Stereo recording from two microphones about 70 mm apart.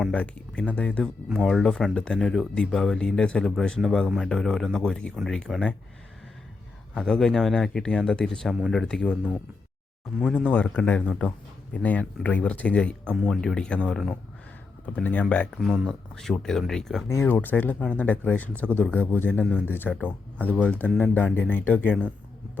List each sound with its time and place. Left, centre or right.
0.1 s speech: centre
1.5 s speech: centre
5.1 s speech: centre
6.9 s speech: centre
10.1 s speech: centre
10.5 s speech: left; by 14.1 s centre
14.9 s speech: centre
15.7 s speech: centre
17.2 s speech: left